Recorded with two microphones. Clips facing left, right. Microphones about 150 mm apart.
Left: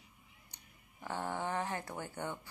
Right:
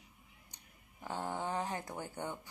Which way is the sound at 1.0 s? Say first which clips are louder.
Left 1 dB; 15° right (ahead or behind).